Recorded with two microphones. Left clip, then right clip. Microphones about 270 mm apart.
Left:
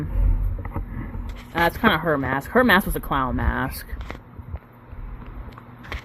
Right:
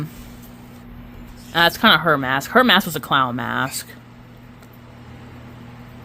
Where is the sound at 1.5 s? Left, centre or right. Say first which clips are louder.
Right 5 dB; right.